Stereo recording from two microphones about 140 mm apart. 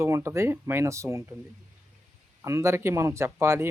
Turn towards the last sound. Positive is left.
turn(degrees=-20)  # may be behind; listen again after turning